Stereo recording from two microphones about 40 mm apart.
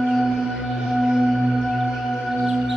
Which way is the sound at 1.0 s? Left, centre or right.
Centre.